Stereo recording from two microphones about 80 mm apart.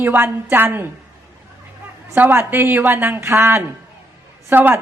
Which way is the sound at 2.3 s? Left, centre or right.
Right.